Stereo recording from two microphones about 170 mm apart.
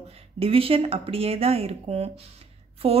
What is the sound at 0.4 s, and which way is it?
A woman's voice, 35° right (ahead or behind).